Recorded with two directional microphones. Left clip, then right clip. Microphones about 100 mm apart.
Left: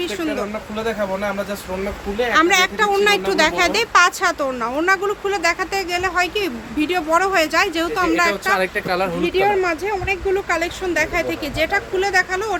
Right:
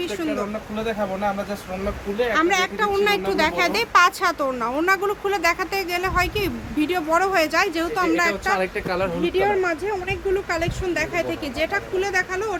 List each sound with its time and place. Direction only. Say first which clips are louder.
0.0 s speech: left 2 dB; 15° left (ahead or behind)
2.3 s a woman's voice: left 6 dB; 35° left (ahead or behind); by 7.7 s centre (ahead or behind)
7.8 s speech: left 3 dB; 15° left (ahead or behind)
8.5 s speech: left 4 dB; 50° left (ahead or behind)
9.2 s speech: left 3 dB; 25° left (ahead or behind)